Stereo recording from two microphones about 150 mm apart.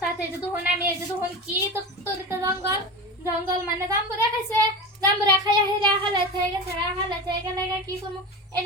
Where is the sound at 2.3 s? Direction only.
20° right (ahead or behind).